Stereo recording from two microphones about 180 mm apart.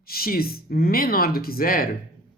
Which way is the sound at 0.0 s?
55° left (ahead or behind).